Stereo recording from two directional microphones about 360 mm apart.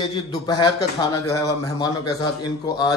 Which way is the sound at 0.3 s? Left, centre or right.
Centre.